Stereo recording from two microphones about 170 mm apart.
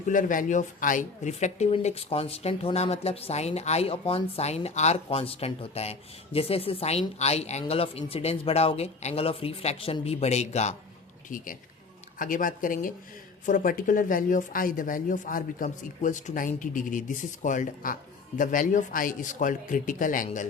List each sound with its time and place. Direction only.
0.1 s speech: 50° left (ahead or behind)
11.3 s speech: 50° left (ahead or behind)